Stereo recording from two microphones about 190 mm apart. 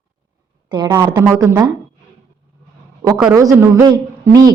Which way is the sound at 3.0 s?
10° right (ahead or behind).